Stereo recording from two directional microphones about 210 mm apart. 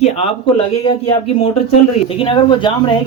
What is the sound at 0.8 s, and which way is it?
Speech, 25° left (ahead or behind).